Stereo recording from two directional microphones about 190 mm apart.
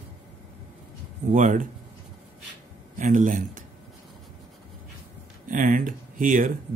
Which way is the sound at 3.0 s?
40° right (ahead or behind).